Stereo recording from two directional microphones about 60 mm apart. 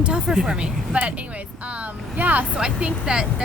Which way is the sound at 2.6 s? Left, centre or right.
Centre.